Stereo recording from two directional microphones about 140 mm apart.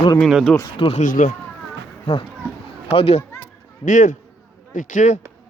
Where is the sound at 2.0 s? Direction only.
40° left (ahead or behind).